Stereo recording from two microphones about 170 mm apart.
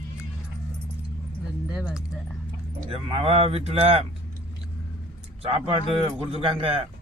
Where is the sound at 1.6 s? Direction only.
5° right (ahead or behind).